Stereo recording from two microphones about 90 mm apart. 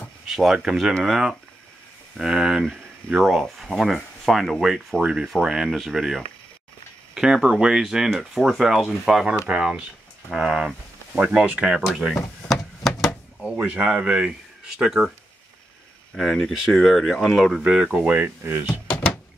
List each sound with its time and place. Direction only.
0.3 s speech: 5° right (ahead or behind)
12.4 s a sound: centre (ahead or behind)
13.4 s speech: 15° right (ahead or behind)
16.2 s speech: 5° left (ahead or behind)
18.0 s speech: 20° right (ahead or behind)